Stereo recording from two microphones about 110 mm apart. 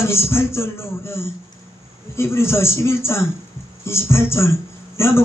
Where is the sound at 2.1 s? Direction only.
25° left (ahead or behind).